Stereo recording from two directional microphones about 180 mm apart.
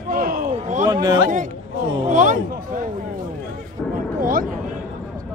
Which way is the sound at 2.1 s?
45° right (ahead or behind).